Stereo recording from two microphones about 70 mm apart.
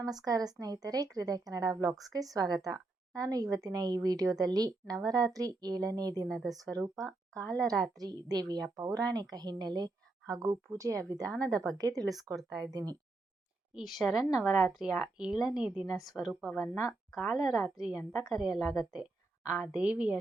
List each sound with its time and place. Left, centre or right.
0.0 s speech: right
6.2 s speech: centre
6.7 s speech: right
7.4 s speech: centre
7.7 s speech: right
9.3 s a woman's voice: right
10.3 s speech: right
13.8 s speech: centre
15.9 s a woman's voice: centre
19.7 s speech: centre